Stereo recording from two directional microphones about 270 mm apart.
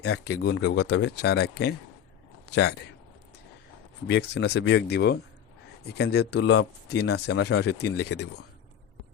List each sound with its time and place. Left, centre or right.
0.3 s a man's voice: left
4.0 s speech: left